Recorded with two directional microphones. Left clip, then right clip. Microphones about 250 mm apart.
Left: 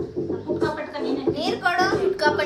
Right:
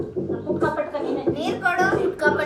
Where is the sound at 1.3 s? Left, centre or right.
Left.